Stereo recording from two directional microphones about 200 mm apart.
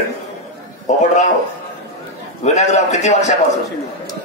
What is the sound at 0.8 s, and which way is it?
Speech, 35° left (ahead or behind).